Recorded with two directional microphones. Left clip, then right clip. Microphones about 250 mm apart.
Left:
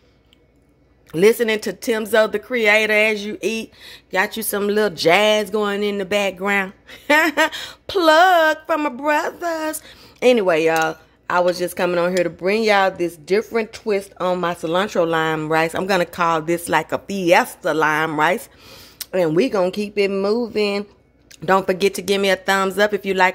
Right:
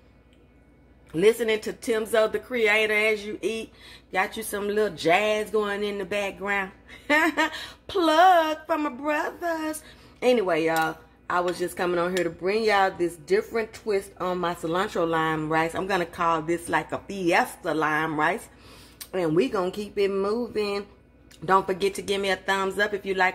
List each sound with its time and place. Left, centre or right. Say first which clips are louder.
1.1 s speech: left 6 dB; left